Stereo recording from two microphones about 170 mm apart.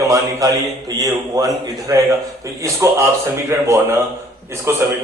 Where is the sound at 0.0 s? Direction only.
20° right (ahead or behind).